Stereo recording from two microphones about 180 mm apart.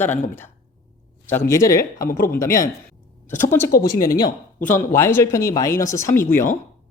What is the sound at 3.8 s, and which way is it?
Speech, 20° left (ahead or behind).